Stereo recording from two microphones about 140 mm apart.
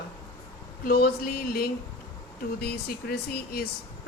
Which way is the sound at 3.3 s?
90° left.